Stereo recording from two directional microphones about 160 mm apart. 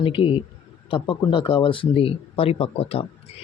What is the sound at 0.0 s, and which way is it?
Speech, 35° left (ahead or behind).